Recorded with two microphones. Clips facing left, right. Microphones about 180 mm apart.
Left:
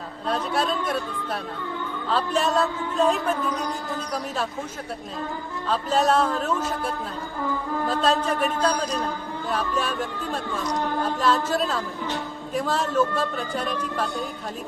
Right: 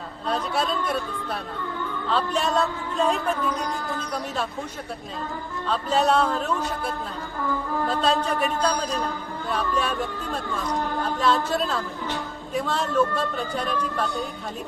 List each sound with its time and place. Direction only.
0.3 s a man's voice: centre (ahead or behind)
5.6 s a man's voice: centre (ahead or behind)
7.9 s a man's voice: centre (ahead or behind)
11.2 s a man's voice: centre (ahead or behind)